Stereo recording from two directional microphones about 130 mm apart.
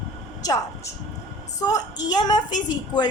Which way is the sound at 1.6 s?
30° left (ahead or behind).